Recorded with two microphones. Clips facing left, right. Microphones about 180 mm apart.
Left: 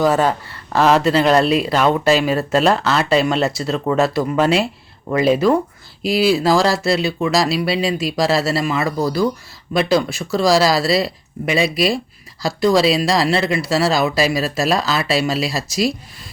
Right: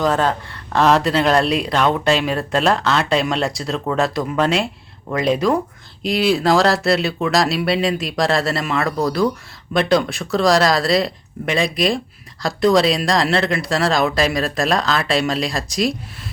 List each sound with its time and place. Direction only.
0.0 s speech: 10° left (ahead or behind)